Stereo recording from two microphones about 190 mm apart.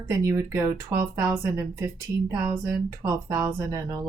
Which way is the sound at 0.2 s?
15° right (ahead or behind).